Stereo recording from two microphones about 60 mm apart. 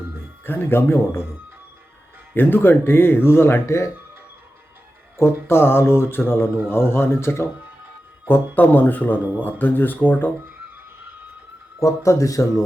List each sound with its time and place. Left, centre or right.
0.4 s speech: left
2.3 s speech: left
5.1 s speech: left
8.3 s speech: left
11.8 s speech: left